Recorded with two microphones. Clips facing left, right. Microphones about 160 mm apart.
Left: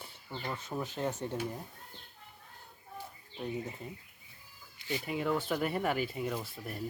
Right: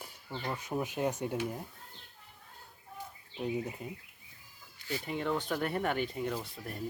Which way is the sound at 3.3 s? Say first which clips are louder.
Right 3 dB; 10° right (ahead or behind).